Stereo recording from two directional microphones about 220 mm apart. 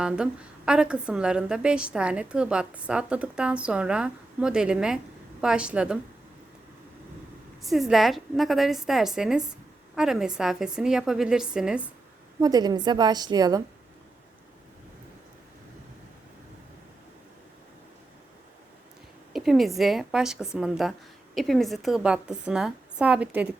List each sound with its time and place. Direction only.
0.0 s a woman's voice: 5° right (ahead or behind)
7.6 s a woman's voice: centre (ahead or behind)
12.4 s a woman's voice: 15° right (ahead or behind)
19.3 s a woman's voice: centre (ahead or behind)